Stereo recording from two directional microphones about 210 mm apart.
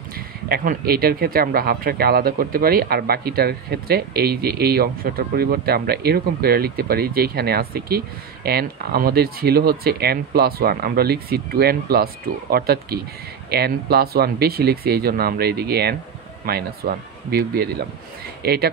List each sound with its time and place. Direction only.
0.5 s speech: 45° right (ahead or behind)